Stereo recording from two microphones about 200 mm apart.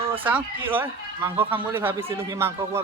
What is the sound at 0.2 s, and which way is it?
Speech, 10° right (ahead or behind).